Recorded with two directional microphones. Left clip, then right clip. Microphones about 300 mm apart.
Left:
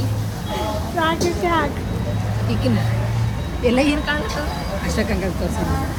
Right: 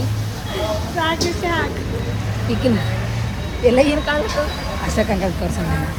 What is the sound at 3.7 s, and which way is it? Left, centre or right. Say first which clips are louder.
Speech: right 4 dB; centre.